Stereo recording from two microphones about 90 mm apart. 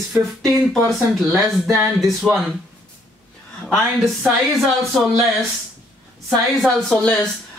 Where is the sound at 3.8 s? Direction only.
Centre (ahead or behind).